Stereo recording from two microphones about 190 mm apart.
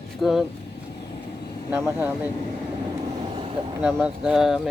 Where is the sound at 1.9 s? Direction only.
5° right (ahead or behind).